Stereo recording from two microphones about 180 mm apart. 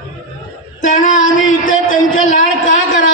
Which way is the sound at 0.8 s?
45° left (ahead or behind).